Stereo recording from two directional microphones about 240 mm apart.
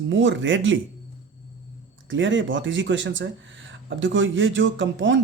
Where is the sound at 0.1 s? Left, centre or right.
Right.